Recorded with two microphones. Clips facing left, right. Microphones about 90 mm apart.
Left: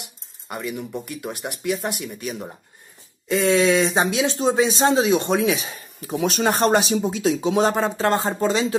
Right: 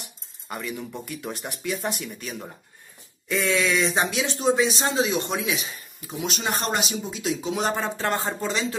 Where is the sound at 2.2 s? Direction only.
20° left (ahead or behind).